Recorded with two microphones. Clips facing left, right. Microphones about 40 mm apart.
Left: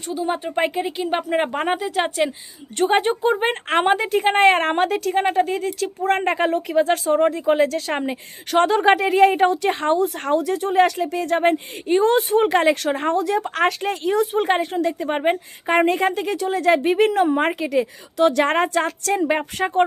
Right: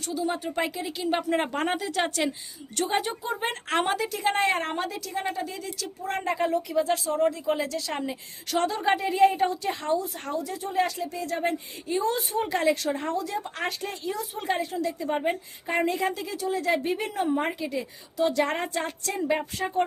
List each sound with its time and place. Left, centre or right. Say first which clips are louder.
0.1 s speech: left 6 dB; left
2.7 s speech: left 9 dB; left
8.8 s speech: left 4 dB; left